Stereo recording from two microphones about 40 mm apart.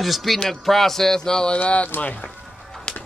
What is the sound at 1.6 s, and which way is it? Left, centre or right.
Speech, left.